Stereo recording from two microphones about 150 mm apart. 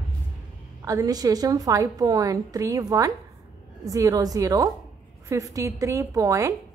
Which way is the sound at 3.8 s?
20° right (ahead or behind).